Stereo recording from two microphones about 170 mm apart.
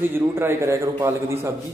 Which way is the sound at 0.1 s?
15° right (ahead or behind).